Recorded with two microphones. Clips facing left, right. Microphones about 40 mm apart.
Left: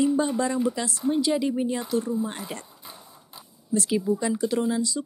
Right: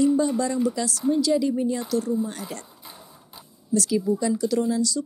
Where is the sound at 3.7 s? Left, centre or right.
Left.